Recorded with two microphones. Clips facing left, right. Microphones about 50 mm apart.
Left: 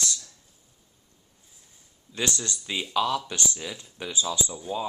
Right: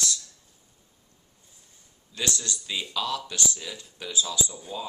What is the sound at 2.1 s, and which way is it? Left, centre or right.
Speech, left.